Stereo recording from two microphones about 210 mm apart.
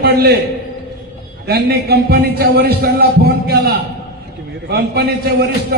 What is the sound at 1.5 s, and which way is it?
A man's voice, 50° right (ahead or behind).